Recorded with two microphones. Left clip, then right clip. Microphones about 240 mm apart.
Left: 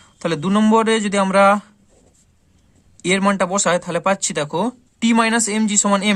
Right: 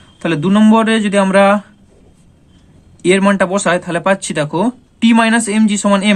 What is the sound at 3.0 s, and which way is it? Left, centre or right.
Speech, left.